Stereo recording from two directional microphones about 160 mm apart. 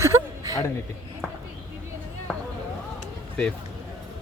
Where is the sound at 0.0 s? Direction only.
20° right (ahead or behind).